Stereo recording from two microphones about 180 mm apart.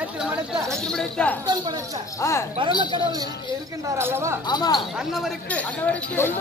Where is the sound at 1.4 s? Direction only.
20° right (ahead or behind).